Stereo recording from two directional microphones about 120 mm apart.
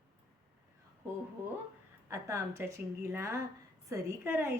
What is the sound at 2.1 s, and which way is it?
A woman's voice, 25° right (ahead or behind).